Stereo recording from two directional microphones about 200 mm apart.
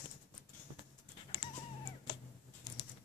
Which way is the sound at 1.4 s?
25° left (ahead or behind).